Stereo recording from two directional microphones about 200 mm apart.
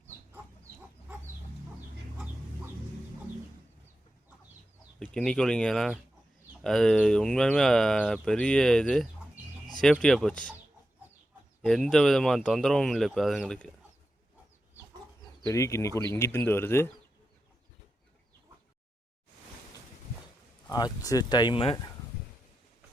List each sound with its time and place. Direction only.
1.0 s chicken: 10° right (ahead or behind)
4.9 s speech: 5° left (ahead or behind)
11.6 s speech: 5° left (ahead or behind)
15.4 s speech: 15° left (ahead or behind)
20.7 s speech: 20° left (ahead or behind)